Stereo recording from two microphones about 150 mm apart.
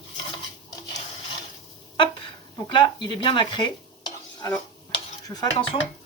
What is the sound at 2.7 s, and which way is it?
Speech, 30° left (ahead or behind).